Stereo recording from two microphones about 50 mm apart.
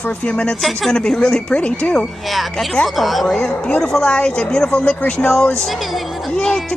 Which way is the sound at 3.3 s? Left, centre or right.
Left.